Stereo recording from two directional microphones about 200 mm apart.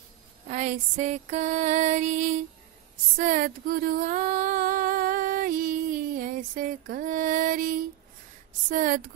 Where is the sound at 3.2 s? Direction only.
45° right (ahead or behind).